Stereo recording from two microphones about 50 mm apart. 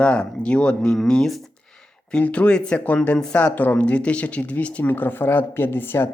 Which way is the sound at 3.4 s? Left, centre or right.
Left.